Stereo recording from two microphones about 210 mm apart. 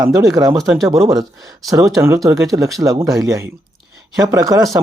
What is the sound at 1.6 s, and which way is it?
Speech, 15° right (ahead or behind).